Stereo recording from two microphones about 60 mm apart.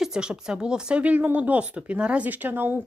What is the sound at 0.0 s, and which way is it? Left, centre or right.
Speech, centre.